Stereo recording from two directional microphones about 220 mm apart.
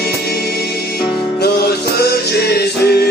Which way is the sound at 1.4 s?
45° left (ahead or behind).